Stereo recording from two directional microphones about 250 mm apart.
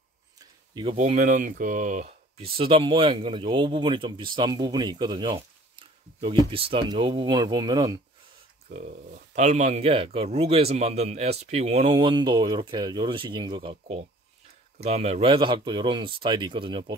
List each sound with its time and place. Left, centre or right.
0.7 s speech: right
8.6 s speech: right